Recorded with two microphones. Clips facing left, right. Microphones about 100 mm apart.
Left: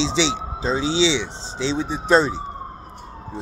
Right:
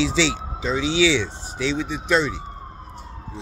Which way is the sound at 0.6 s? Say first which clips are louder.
Even; 35° left (ahead or behind).